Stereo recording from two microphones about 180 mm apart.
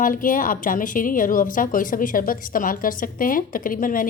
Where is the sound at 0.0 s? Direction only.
50° left (ahead or behind).